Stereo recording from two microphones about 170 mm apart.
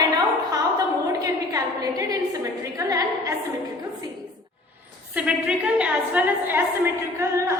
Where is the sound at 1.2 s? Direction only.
20° right (ahead or behind).